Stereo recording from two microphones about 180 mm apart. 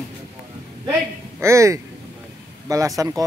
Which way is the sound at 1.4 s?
15° right (ahead or behind).